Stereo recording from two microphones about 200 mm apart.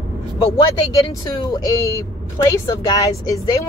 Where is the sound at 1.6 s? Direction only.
15° left (ahead or behind).